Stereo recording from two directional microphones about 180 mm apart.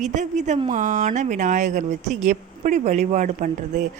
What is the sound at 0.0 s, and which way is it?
Speech, 40° right (ahead or behind).